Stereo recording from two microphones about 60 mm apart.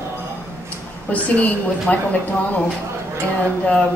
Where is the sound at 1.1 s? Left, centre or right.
Left.